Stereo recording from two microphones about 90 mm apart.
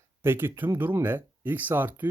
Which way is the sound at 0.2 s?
25° right (ahead or behind).